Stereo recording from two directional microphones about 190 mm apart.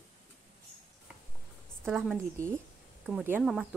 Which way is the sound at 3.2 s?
5° right (ahead or behind).